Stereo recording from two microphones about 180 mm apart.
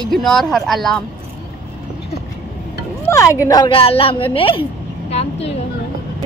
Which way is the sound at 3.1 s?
15° left (ahead or behind).